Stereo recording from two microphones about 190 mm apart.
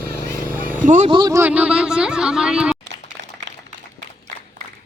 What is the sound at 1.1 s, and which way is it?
Speech, 20° right (ahead or behind).